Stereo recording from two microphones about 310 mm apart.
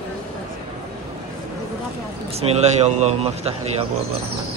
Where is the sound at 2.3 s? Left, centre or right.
Right.